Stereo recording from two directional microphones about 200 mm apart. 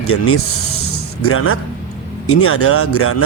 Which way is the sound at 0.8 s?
90° left.